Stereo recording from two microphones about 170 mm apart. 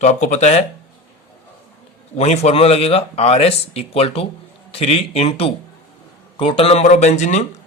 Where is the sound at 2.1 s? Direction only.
40° left (ahead or behind).